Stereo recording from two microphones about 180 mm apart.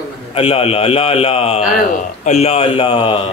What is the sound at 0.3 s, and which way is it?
Speech, 30° left (ahead or behind).